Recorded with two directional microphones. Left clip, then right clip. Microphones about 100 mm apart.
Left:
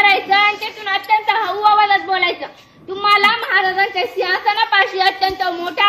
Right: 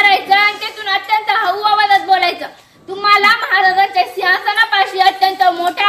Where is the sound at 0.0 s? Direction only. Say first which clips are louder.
Right 2 dB; 30° right (ahead or behind).